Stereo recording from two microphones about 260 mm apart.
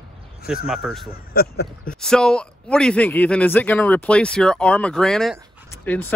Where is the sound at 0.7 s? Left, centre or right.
Centre.